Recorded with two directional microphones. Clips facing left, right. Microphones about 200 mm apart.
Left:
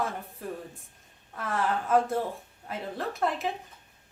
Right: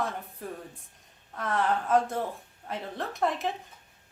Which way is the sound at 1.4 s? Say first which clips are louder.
Right 1 dB; centre (ahead or behind).